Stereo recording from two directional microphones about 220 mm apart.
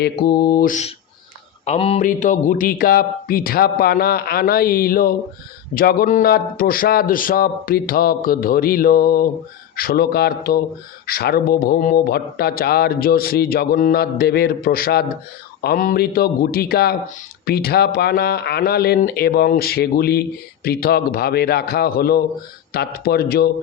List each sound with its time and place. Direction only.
0.0 s speech: 45° left (ahead or behind)